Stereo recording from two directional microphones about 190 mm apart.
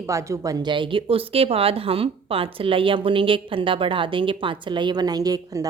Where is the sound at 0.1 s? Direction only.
15° right (ahead or behind).